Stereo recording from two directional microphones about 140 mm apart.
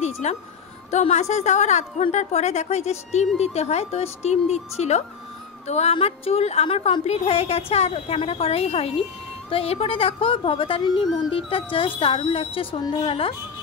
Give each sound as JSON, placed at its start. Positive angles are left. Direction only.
{"t": 0.0, "sound": "music", "side_deg": 50}
{"t": 0.8, "sound": "a woman's voice", "side_deg": 55}